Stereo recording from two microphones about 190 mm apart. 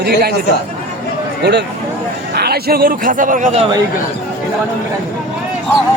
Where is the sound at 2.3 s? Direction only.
55° right (ahead or behind).